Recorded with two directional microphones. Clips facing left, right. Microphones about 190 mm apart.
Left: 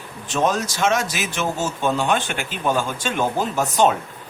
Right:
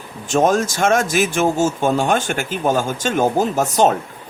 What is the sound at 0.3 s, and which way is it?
Speech, 45° right (ahead or behind).